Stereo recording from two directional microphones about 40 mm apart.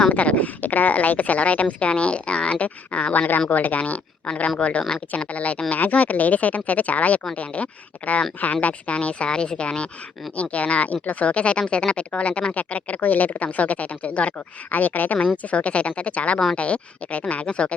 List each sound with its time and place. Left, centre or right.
0.1 s speech: left
15.4 s speech: left